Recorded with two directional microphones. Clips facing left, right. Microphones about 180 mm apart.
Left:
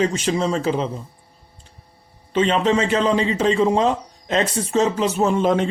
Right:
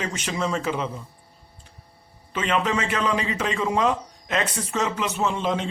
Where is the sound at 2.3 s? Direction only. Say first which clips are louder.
Left 6 dB; 30° left (ahead or behind).